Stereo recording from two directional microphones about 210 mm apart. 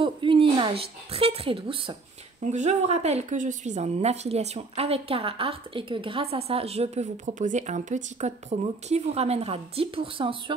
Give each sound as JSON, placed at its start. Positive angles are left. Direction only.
{"t": 0.0, "sound": "a woman's voice", "side_deg": -25}